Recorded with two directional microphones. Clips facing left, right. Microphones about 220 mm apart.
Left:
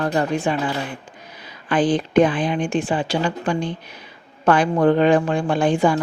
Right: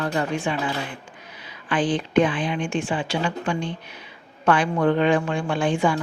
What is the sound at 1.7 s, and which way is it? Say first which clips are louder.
A woman's voice: left 4 dB; 40° left (ahead or behind).